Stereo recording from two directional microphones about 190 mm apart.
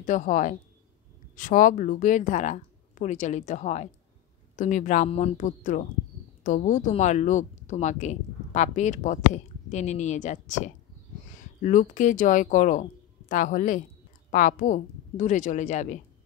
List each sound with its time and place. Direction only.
0.0 s speech: 40° left (ahead or behind)